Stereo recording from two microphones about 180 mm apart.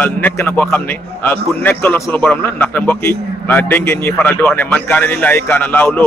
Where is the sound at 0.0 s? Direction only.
10° left (ahead or behind).